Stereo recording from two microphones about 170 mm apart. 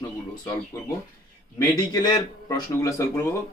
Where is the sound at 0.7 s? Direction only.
20° left (ahead or behind).